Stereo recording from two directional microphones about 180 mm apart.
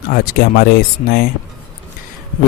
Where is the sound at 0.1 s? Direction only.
55° left (ahead or behind).